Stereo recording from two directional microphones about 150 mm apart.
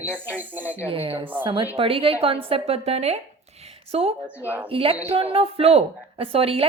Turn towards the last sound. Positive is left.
turn(degrees=-40)  # may be behind; listen again after turning